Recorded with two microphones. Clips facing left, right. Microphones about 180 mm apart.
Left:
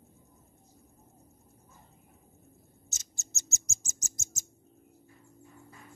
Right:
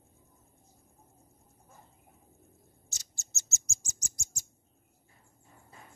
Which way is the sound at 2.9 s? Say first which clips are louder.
Left 3 dB; 20° left (ahead or behind).